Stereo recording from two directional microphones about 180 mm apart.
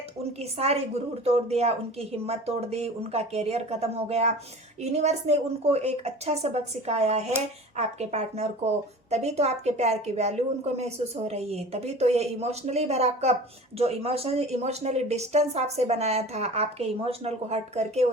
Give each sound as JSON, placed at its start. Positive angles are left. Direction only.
{"t": 0.3, "sound": "speech", "side_deg": -35}